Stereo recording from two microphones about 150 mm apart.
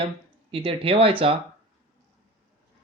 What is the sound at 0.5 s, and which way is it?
Speech, 40° right (ahead or behind).